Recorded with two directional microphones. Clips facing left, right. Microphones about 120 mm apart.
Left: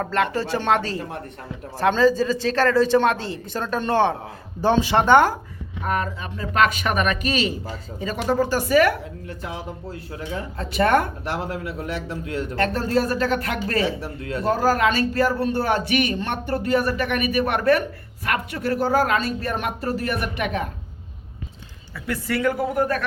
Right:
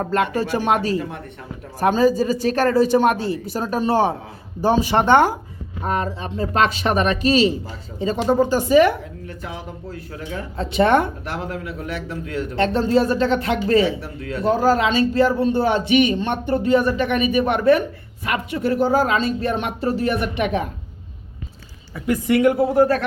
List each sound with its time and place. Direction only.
0.0 s speech: 15° right (ahead or behind)
5.8 s speech: 30° right (ahead or behind)
10.6 s speech: 25° right (ahead or behind)
11.9 s a man's voice: 35° left (ahead or behind)
12.5 s speech: 25° right (ahead or behind)
13.8 s a man's voice: 40° left (ahead or behind)
14.5 s speech: 20° right (ahead or behind)
21.9 s speech: 15° right (ahead or behind)